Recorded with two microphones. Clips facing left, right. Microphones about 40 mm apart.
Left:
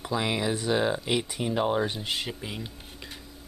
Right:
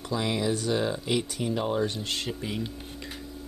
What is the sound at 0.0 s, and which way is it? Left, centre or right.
Speech, centre.